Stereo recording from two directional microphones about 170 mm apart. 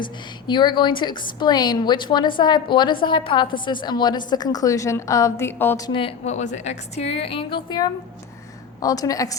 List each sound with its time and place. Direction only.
0.0 s a woman's voice: 25° left (ahead or behind)
5.8 s a woman's voice: 30° left (ahead or behind)